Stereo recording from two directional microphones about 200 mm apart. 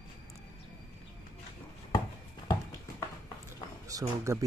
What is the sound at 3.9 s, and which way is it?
Speech, 15° right (ahead or behind).